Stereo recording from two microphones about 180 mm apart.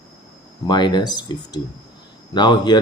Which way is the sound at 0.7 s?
25° left (ahead or behind).